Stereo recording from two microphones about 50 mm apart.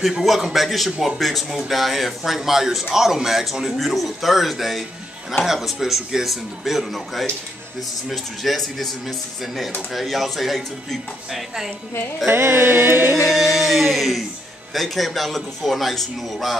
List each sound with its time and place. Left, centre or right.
0.0 s speech: centre
12.3 s music: right
13.3 s speech: centre